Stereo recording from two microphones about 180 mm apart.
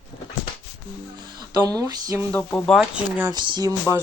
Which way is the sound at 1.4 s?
20° right (ahead or behind).